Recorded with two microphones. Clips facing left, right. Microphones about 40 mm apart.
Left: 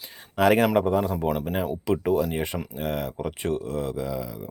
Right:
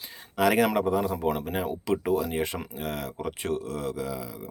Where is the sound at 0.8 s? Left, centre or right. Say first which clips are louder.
Left 3 dB; centre.